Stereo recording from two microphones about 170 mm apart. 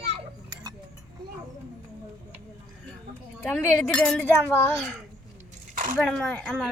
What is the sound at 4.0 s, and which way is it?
Speech, 5° left (ahead or behind).